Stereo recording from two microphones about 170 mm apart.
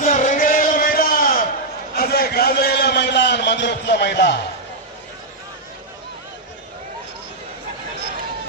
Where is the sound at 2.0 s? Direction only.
65° left (ahead or behind); by 4.4 s 90° left.